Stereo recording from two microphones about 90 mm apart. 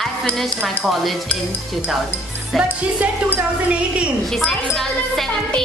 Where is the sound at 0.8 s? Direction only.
Centre (ahead or behind).